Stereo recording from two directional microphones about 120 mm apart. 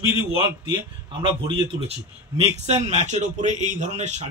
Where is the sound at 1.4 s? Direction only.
40° right (ahead or behind).